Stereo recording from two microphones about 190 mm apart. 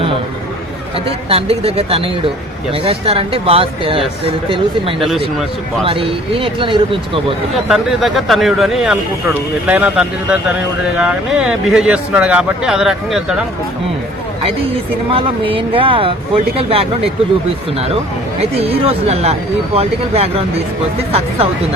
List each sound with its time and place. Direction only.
1.0 s speech: 30° right (ahead or behind)
4.9 s speech: centre (ahead or behind)
5.8 s speech: 30° right (ahead or behind)
7.7 s speech: centre (ahead or behind)
15.1 s speech: 25° right (ahead or behind)